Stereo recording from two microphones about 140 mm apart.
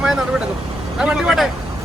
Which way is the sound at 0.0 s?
5° right (ahead or behind).